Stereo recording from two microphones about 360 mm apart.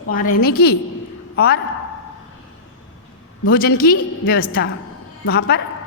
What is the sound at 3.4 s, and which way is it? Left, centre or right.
A woman's voice, left.